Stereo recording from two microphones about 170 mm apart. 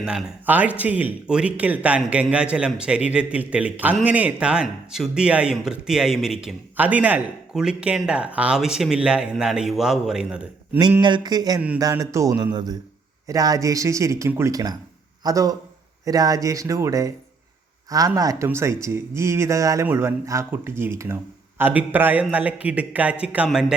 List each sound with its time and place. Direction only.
0.0 s speech: 5° right (ahead or behind)
11.0 s speech: 25° right (ahead or behind); by 23.7 s 5° right (ahead or behind)